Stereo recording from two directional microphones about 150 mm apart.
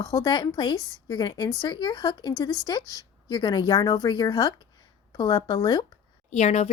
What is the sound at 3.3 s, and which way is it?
A woman's voice, 30° left (ahead or behind).